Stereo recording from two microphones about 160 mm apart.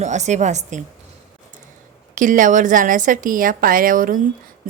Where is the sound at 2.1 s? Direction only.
55° right (ahead or behind).